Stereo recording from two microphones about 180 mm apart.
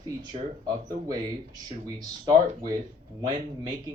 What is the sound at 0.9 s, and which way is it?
Speech, 20° right (ahead or behind).